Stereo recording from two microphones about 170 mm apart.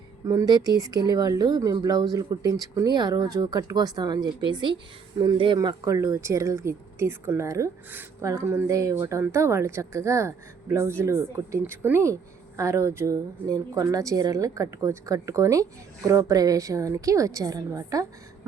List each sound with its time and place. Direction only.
0.3 s speech: 20° right (ahead or behind)